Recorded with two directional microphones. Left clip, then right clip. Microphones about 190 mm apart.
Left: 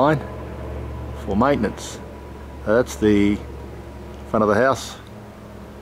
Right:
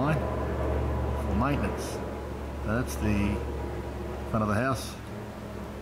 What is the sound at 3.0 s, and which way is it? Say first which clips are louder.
Speech: left 14 dB; 45° right (ahead or behind).